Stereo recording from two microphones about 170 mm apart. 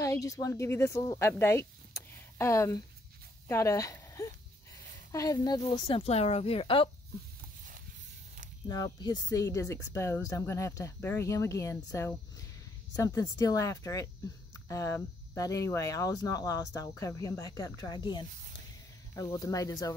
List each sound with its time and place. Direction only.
0.0 s speech: 20° left (ahead or behind)
8.6 s speech: 25° left (ahead or behind)